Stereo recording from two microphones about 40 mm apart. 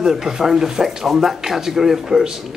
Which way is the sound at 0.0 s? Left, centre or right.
Centre.